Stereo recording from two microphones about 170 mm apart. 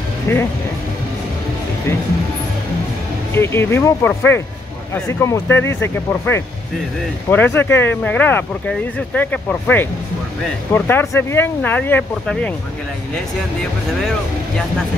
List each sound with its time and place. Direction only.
0.3 s speech: 15° left (ahead or behind)
3.3 s speech: 15° left (ahead or behind)